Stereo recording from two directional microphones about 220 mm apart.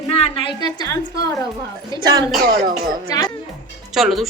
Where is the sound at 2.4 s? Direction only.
45° right (ahead or behind).